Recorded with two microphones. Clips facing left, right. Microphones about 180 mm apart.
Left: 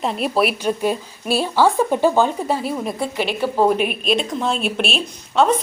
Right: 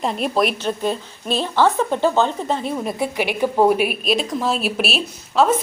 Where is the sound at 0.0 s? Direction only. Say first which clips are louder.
Even; centre (ahead or behind).